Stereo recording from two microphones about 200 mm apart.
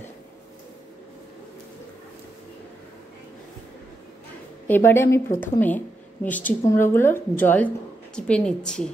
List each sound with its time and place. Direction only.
4.6 s a woman's voice: 10° left (ahead or behind)